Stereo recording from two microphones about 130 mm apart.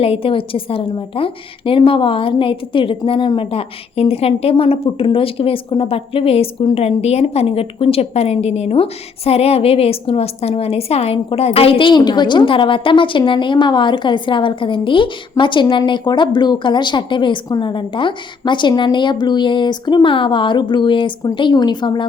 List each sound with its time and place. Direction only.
0.0 s a woman's voice: 45° left (ahead or behind)